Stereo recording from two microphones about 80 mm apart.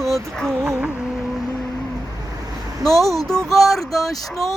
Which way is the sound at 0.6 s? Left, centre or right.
Right.